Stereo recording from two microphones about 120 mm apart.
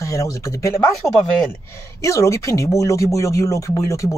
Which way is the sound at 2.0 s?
25° left (ahead or behind).